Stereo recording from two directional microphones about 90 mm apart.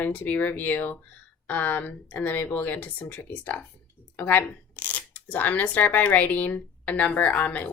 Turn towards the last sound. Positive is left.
turn(degrees=15)  # may be behind; listen again after turning